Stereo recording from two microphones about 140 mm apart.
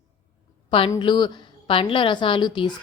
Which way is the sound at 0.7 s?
35° left (ahead or behind).